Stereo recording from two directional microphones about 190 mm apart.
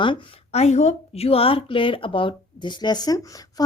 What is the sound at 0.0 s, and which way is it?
A woman's voice, 30° left (ahead or behind).